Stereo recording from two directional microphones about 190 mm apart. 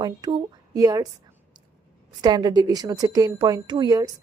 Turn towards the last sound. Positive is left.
turn(degrees=-20)  # may be behind; listen again after turning